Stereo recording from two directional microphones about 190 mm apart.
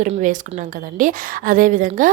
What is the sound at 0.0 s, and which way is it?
A woman's voice, 40° right (ahead or behind).